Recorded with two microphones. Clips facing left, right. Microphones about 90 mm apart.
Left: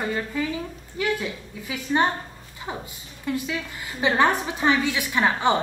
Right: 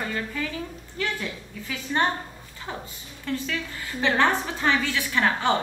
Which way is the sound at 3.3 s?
15° left (ahead or behind).